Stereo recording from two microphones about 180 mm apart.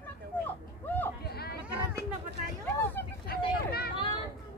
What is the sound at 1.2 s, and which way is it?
Chatter, 60° left (ahead or behind).